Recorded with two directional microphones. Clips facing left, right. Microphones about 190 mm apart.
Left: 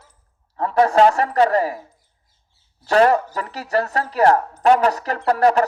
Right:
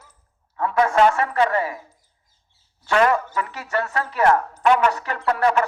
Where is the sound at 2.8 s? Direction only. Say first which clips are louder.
Left 4 dB; 35° left (ahead or behind).